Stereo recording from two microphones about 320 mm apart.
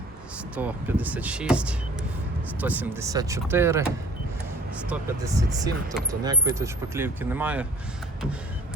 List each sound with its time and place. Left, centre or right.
0.5 s speech: centre